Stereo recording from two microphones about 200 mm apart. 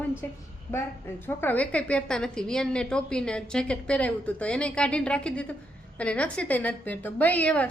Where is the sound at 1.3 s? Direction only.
10° left (ahead or behind).